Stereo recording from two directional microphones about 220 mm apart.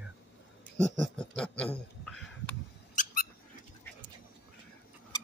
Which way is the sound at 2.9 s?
40° left (ahead or behind).